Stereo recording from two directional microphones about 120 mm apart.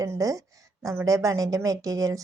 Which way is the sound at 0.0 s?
30° right (ahead or behind).